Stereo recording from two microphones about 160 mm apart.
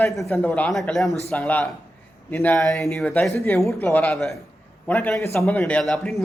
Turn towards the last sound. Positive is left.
turn(degrees=0)  # may be behind; listen again after turning